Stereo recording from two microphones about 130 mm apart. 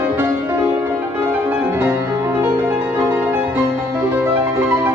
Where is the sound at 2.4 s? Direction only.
20° right (ahead or behind).